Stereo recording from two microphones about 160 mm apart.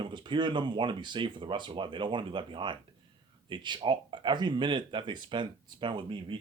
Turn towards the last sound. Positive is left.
turn(degrees=-30)  # may be behind; listen again after turning